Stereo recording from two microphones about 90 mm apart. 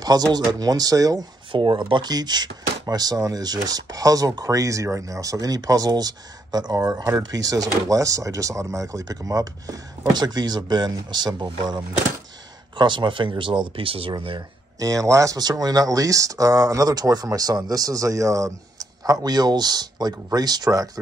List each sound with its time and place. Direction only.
0.0 s speech: 45° right (ahead or behind)
1.5 s speech: 60° right (ahead or behind)
13.7 s speech: 85° right
14.1 s speech: 65° right (ahead or behind)
14.8 s speech: 40° right (ahead or behind)